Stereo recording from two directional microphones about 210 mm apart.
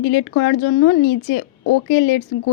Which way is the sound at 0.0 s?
65° left (ahead or behind).